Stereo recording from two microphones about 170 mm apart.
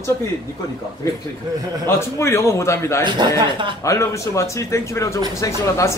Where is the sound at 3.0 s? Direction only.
25° right (ahead or behind).